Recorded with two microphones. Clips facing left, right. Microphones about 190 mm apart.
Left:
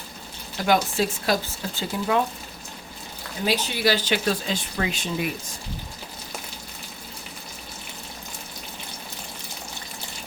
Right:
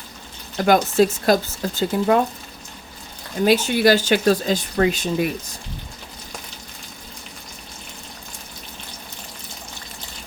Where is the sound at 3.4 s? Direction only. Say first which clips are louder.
Right 8 dB; 50° right (ahead or behind).